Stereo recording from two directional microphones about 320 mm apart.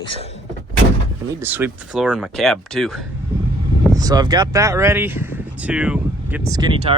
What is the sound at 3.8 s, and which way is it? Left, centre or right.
Speech, centre.